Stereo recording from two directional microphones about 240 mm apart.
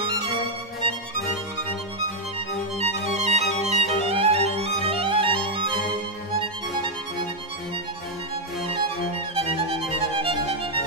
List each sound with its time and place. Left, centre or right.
2.8 s music: right
4.6 s violin: right
6.4 s music: right
9.3 s music: right